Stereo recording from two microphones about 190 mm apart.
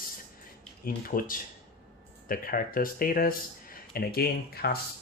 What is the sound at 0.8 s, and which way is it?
Speech, 50° left (ahead or behind).